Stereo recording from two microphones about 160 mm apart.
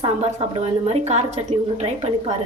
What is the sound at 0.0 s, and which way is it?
A woman's voice, 45° right (ahead or behind).